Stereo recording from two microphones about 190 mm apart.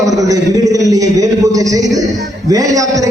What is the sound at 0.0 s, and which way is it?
A man's voice, 20° right (ahead or behind).